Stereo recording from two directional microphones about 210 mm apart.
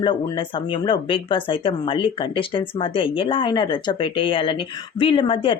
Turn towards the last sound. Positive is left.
turn(degrees=25)  # may be behind; listen again after turning